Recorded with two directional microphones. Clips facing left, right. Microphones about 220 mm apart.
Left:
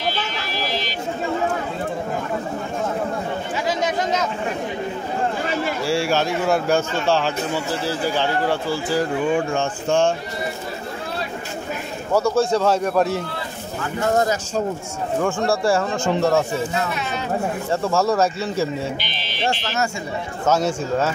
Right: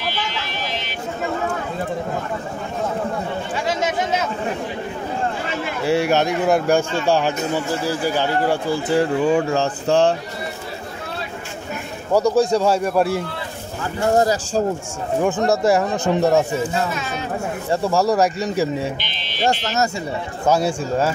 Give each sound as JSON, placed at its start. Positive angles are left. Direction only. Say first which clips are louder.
{"t": 3.6, "sound": "chatter", "louder": "even", "side_deg": -5}
{"t": 5.9, "sound": "a man's voice", "louder": "right 4 dB", "side_deg": -20}
{"t": 12.1, "sound": "a man's voice", "louder": "right 2 dB", "side_deg": -15}
{"t": 14.1, "sound": "speech", "louder": "right 4 dB", "side_deg": -35}
{"t": 15.1, "sound": "a man's voice", "louder": "right 3 dB", "side_deg": -20}
{"t": 17.8, "sound": "a man's voice", "louder": "right 2 dB", "side_deg": -15}
{"t": 19.4, "sound": "speech", "louder": "right 3 dB", "side_deg": -40}
{"t": 20.4, "sound": "a man's voice", "louder": "right 1 dB", "side_deg": -10}